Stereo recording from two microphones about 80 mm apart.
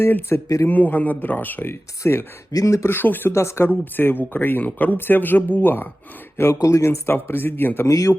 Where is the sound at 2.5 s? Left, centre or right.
Left.